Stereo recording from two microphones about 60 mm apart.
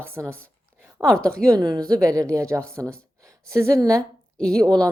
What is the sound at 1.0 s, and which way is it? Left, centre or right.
Speech, right.